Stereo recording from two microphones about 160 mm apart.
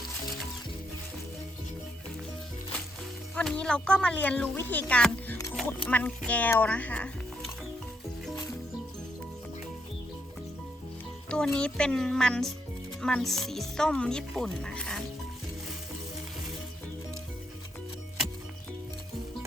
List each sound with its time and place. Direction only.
3.3 s speech: 5° left (ahead or behind)
11.3 s speech: 5° left (ahead or behind)